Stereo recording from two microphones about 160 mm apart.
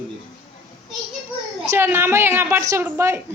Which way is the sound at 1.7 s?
15° right (ahead or behind).